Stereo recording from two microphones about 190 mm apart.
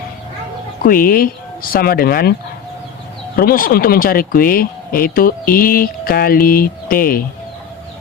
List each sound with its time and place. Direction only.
0.9 s speech: 50° left (ahead or behind)
3.3 s speech: 50° left (ahead or behind)